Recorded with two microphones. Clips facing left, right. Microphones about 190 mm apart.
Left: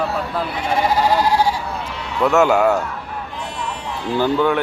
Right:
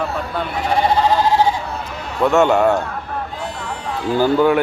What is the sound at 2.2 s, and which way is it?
Speech, 5° left (ahead or behind).